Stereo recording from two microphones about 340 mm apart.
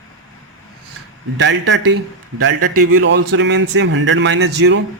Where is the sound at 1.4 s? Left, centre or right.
Right.